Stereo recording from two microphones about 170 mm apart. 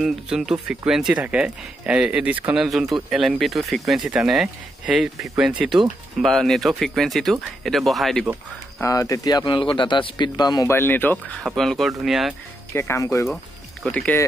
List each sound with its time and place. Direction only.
0.0 s speech: centre (ahead or behind)
8.8 s speech: 20° left (ahead or behind); by 12.4 s centre (ahead or behind)
12.7 s speech: 15° left (ahead or behind)
13.8 s speech: 5° left (ahead or behind)